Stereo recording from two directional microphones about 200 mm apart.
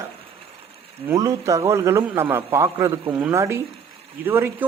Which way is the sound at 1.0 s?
15° right (ahead or behind).